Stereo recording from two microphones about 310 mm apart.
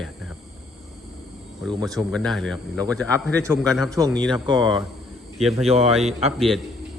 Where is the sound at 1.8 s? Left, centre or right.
Centre.